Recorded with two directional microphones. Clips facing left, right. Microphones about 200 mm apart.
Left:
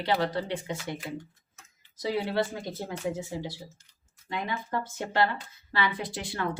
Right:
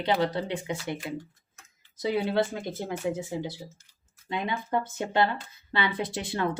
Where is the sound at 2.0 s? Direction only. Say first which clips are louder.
Right 2 dB; 20° right (ahead or behind).